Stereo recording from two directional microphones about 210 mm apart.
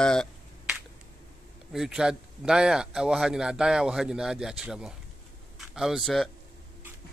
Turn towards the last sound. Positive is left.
turn(degrees=0)  # may be behind; listen again after turning